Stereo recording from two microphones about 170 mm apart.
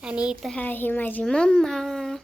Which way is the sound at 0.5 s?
10° left (ahead or behind).